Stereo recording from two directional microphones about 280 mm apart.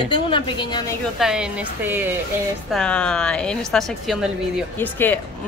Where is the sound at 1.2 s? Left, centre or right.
Centre.